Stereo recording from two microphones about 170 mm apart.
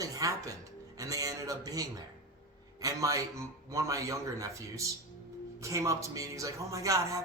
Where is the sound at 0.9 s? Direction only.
20° right (ahead or behind).